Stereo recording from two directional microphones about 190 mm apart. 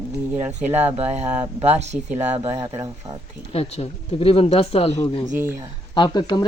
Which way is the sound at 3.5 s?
30° left (ahead or behind).